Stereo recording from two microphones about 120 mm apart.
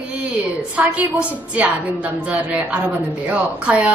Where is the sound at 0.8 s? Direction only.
10° right (ahead or behind).